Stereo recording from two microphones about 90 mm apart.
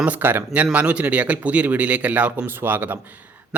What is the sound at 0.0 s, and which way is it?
A man's voice, 20° right (ahead or behind).